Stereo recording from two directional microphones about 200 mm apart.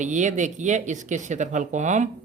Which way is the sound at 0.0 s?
35° right (ahead or behind).